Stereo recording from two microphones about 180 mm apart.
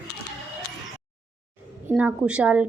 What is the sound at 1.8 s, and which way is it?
Speech, 5° right (ahead or behind).